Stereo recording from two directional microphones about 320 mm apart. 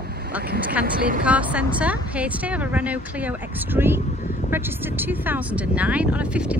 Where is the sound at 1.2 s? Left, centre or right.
Centre.